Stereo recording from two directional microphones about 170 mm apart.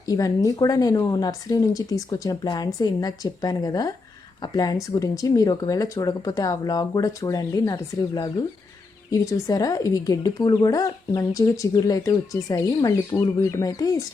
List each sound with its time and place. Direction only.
0.1 s speech: 20° left (ahead or behind)